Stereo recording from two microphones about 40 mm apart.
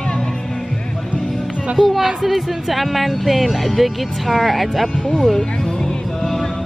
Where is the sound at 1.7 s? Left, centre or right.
Centre.